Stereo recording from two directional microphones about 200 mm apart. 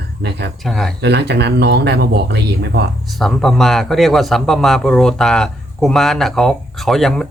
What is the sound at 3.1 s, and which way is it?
A man's voice, centre (ahead or behind).